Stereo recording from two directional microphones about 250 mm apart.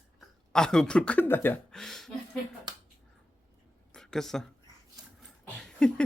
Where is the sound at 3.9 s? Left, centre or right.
Centre.